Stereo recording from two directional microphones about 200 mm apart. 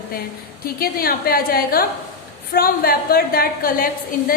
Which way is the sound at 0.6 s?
50° left (ahead or behind).